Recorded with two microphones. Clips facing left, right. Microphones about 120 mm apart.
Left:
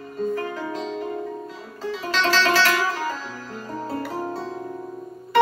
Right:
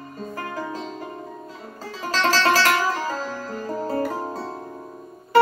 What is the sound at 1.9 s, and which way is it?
Music, 40° right (ahead or behind).